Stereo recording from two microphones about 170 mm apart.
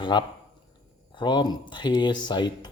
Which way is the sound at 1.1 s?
25° left (ahead or behind).